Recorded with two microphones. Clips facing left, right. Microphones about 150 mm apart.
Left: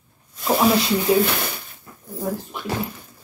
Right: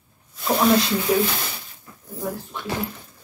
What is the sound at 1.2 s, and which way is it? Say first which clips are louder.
Speech: left 2 dB; 65° left (ahead or behind).